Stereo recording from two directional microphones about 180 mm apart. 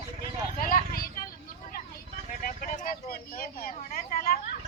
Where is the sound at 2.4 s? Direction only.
50° left (ahead or behind).